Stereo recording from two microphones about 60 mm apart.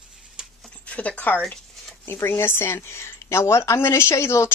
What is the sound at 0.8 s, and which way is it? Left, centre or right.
Speech, left.